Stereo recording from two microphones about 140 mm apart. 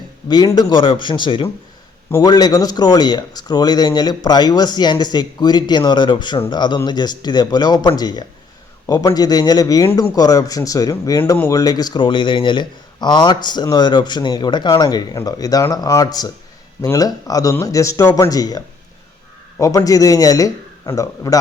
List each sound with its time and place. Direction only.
0.3 s speech: 30° left (ahead or behind)
2.0 s a man's voice: 20° left (ahead or behind)
2.3 s speech: 30° left (ahead or behind)